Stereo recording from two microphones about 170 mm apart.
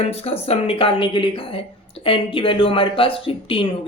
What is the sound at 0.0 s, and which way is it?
A woman's voice, 35° left (ahead or behind).